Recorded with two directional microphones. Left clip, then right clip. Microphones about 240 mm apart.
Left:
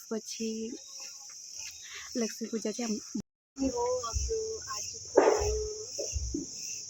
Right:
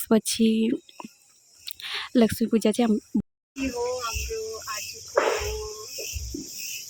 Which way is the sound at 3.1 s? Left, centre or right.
Right.